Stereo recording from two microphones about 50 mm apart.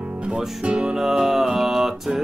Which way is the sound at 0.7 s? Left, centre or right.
Right.